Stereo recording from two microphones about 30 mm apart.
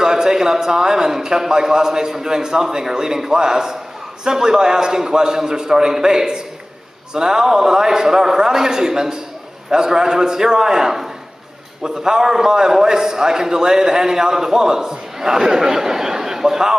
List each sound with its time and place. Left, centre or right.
0.0 s a man's voice: right